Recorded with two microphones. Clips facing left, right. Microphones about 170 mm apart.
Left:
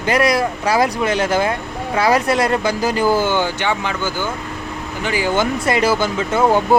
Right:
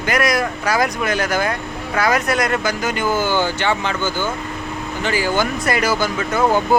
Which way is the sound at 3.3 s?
15° left (ahead or behind).